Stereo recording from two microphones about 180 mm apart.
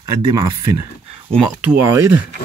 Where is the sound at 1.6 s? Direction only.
10° right (ahead or behind).